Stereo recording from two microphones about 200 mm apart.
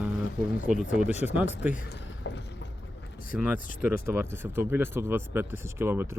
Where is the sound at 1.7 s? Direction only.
50° left (ahead or behind).